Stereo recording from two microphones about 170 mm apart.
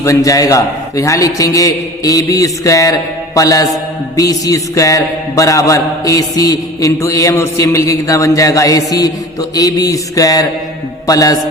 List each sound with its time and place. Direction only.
0.0 s mantra: 20° left (ahead or behind)
11.0 s music: 20° left (ahead or behind)